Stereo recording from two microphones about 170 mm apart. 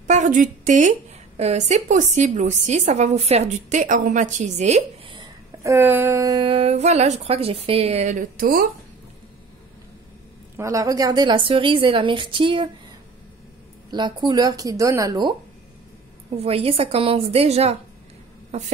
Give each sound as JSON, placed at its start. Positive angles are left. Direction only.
{"t": 0.0, "sound": "a woman's voice", "side_deg": -45}
{"t": 5.6, "sound": "speech", "side_deg": -15}
{"t": 10.6, "sound": "a woman's voice", "side_deg": -20}
{"t": 13.8, "sound": "a woman's voice", "side_deg": -25}
{"t": 16.3, "sound": "speech", "side_deg": -35}